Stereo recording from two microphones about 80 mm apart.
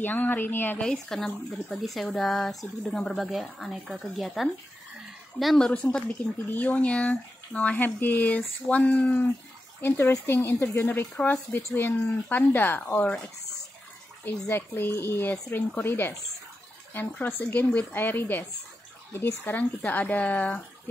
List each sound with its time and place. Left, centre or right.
0.0 s speech: left
0.7 s speech: centre
5.6 s speech: centre
14.2 s speech: left